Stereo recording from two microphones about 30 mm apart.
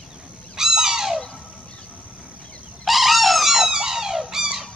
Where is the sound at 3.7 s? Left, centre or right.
Centre.